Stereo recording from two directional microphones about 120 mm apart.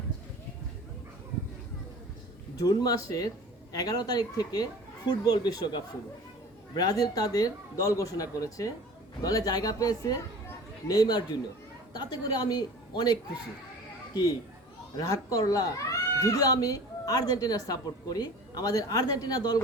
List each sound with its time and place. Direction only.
2.6 s speech: 35° left (ahead or behind)